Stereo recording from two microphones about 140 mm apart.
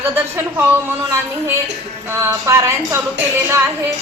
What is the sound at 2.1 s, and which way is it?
Speech, 20° right (ahead or behind).